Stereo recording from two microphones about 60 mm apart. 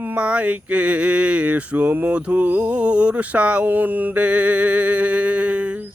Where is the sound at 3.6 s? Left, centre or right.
Right.